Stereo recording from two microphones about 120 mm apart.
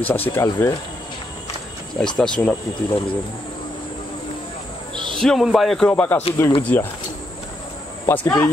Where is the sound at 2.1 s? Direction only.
10° left (ahead or behind).